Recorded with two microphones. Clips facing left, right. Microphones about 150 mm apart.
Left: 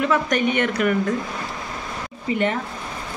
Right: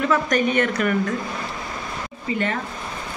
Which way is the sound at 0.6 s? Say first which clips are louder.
Even; 15° left (ahead or behind).